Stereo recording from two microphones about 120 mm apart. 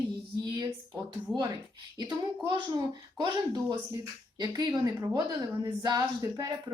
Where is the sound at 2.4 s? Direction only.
35° right (ahead or behind).